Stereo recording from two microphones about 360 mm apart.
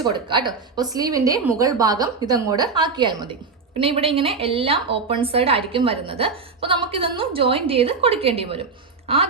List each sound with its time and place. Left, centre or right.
0.0 s a woman's voice: centre